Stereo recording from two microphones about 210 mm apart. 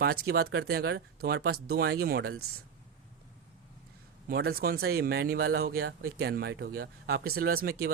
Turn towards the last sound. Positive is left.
turn(degrees=-45)  # may be behind; listen again after turning